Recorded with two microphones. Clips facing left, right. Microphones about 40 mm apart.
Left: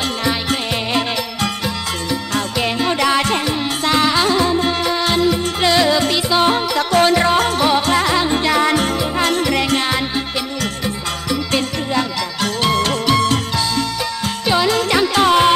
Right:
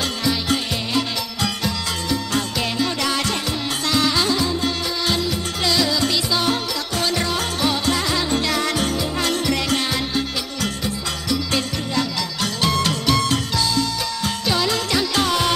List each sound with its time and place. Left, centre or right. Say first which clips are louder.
0.2 s music: even; left
2.3 s music: left 5 dB; left
11.5 s music: left 7 dB; left
14.5 s music: left 6 dB; left